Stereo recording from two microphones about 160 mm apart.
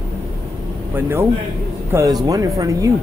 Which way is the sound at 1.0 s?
15° right (ahead or behind).